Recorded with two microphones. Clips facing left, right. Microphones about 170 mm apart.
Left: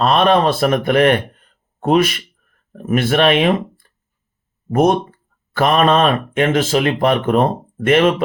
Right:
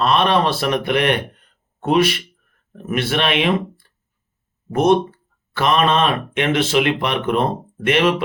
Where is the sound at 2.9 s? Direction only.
45° left (ahead or behind).